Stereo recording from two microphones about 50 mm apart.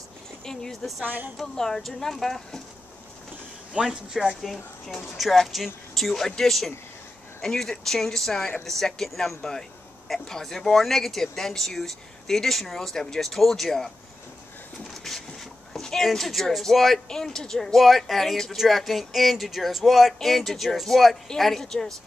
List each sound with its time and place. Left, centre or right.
0.5 s speech: centre
1.0 s a woman's voice: right
1.4 s speech: centre
3.8 s speech: centre
4.4 s speech: centre
15.1 s a sound: centre
16.7 s speech: centre
17.1 s speech: centre